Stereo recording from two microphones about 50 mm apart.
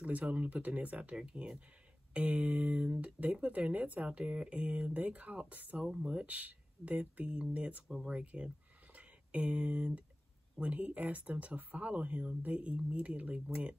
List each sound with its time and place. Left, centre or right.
0.0 s speech: right
5.8 s speech: centre